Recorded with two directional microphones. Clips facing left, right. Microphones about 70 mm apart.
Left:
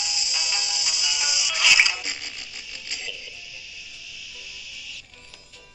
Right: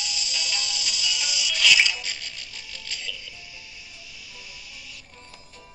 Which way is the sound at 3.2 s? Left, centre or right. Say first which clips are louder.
Left 1 dB; right.